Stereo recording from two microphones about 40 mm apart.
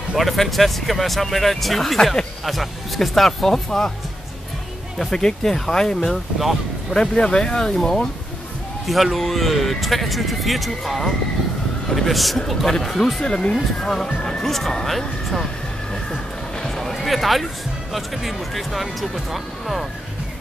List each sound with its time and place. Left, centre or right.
0.2 s speech: centre
4.9 s speech: centre
6.0 s speech: centre
7.2 s speech: left
16.6 s a sound: centre
17.9 s speech: centre